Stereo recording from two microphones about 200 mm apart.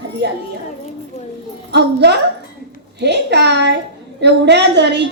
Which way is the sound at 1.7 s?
60° right (ahead or behind).